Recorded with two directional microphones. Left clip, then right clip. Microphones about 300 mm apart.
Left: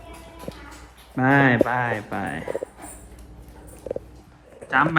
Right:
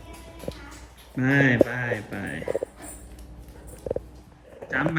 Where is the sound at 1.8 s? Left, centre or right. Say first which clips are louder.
Left 4 dB; centre.